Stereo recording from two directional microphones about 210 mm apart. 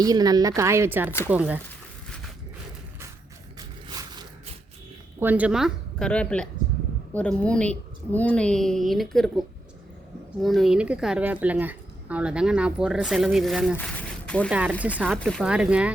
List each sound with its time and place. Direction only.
0.0 s speech: 20° right (ahead or behind)
3.8 s a sound: 20° right (ahead or behind)
5.2 s speech: 10° right (ahead or behind)
10.4 s speech: centre (ahead or behind)
13.7 s a sound: 5° left (ahead or behind)
14.8 s speech: 5° right (ahead or behind)